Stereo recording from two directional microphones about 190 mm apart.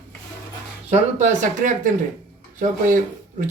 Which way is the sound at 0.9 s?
40° right (ahead or behind).